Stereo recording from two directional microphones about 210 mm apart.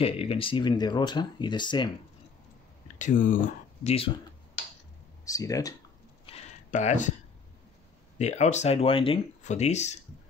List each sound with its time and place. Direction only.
0.0 s speech: 25° left (ahead or behind)
3.0 s speech: 40° left (ahead or behind)
3.8 s speech: 25° left (ahead or behind)
5.2 s speech: 15° left (ahead or behind)
6.2 s a sound: 30° left (ahead or behind)
8.2 s speech: 30° left (ahead or behind)